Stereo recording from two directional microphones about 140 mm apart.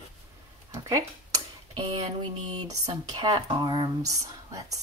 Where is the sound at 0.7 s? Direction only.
25° right (ahead or behind).